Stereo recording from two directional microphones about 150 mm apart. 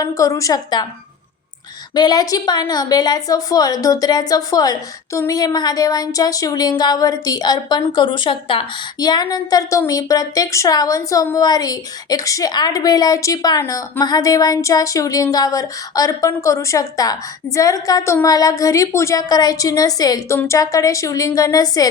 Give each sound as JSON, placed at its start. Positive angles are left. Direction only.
{"t": 0.0, "sound": "a woman's voice", "side_deg": 20}
{"t": 2.0, "sound": "a woman's voice", "side_deg": 25}